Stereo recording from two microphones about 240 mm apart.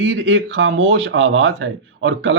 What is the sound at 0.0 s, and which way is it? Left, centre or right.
Speech, right.